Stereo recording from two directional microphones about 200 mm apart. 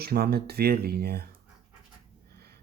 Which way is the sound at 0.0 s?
50° right (ahead or behind).